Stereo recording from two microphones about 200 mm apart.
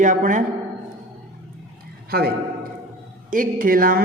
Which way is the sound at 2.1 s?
50° right (ahead or behind).